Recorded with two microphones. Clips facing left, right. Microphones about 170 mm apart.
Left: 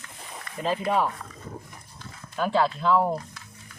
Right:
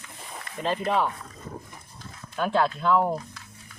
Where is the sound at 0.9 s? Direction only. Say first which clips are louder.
Even; 5° left (ahead or behind).